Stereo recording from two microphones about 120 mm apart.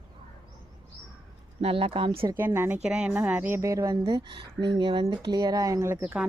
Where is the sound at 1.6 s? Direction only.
50° right (ahead or behind).